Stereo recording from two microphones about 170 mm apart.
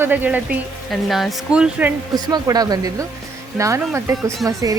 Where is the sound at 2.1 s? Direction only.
25° right (ahead or behind).